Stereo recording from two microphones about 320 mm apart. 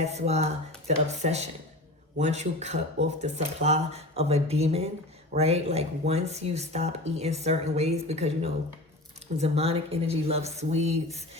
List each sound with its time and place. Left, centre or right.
0.0 s speech: centre